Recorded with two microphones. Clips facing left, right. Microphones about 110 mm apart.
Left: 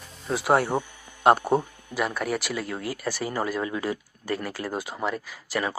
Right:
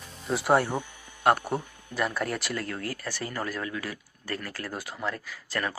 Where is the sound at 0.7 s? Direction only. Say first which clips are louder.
Left 5 dB; 20° left (ahead or behind).